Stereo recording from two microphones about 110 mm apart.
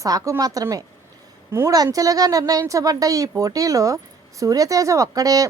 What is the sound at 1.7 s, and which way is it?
Speech, 35° right (ahead or behind).